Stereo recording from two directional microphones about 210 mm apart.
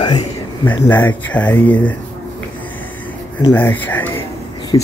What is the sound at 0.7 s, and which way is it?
Speech, 10° left (ahead or behind).